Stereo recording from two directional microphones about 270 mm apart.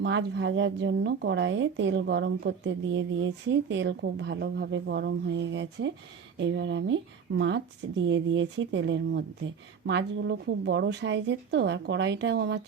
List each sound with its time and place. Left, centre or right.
0.0 s a woman's voice: right